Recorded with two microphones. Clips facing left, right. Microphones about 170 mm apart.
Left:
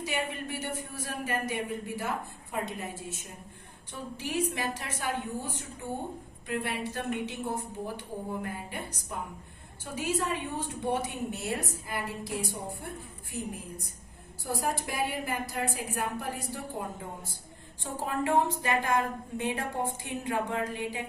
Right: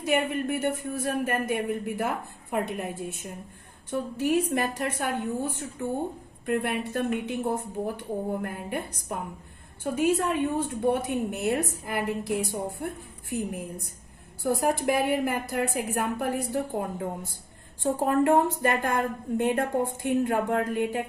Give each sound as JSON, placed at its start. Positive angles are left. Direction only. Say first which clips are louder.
{"t": 0.0, "sound": "a woman's voice", "louder": "right 8 dB", "side_deg": -55}
{"t": 6.4, "sound": "a woman's voice", "louder": "right 6 dB", "side_deg": -55}